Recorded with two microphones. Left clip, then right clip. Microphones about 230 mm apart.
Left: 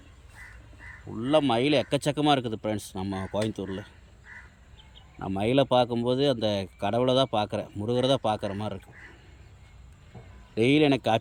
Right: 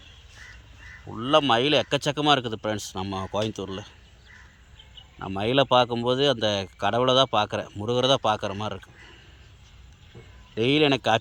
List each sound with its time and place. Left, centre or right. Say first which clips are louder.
1.2 s speech: right 3 dB; centre
5.2 s speech: right 2 dB; centre
10.5 s speech: right 1 dB; centre